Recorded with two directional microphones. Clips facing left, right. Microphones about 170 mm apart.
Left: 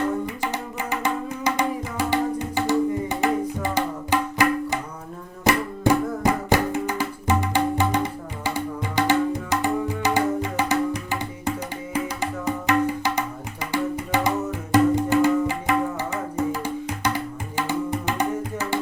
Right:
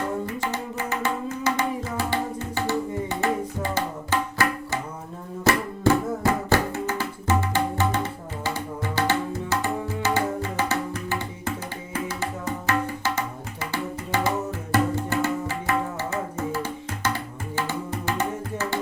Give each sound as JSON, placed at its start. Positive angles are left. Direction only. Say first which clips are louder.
{"t": 0.3, "sound": "music", "louder": "left 1 dB", "side_deg": 15}
{"t": 11.9, "sound": "tabla", "louder": "left 3 dB", "side_deg": 15}
{"t": 16.5, "sound": "music", "louder": "left 3 dB", "side_deg": 15}